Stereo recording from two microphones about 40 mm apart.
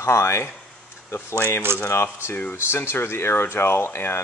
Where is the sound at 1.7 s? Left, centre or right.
Right.